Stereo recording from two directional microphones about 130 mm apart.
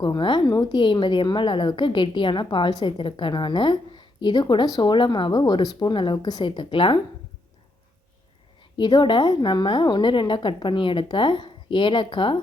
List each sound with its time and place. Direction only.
0.0 s a woman's voice: 35° left (ahead or behind)
8.7 s a woman's voice: 35° left (ahead or behind)